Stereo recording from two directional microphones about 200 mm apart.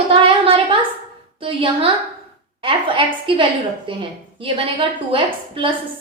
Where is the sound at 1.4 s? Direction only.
30° right (ahead or behind).